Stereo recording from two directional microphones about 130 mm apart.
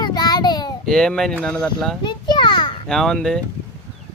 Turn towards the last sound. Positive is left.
turn(degrees=5)  # may be behind; listen again after turning